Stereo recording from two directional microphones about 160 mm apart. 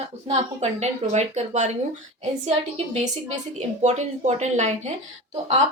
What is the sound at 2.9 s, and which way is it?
Speech, 45° right (ahead or behind).